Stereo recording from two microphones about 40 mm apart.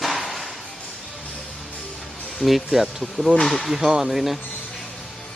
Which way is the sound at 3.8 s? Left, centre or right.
Centre.